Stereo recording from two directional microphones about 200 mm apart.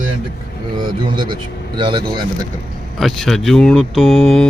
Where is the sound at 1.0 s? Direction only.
25° right (ahead or behind).